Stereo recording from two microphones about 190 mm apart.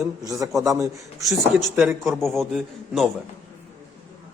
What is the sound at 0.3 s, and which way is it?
Speech, 15° right (ahead or behind).